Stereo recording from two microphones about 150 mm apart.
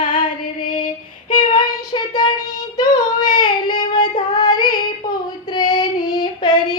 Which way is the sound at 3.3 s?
30° left (ahead or behind).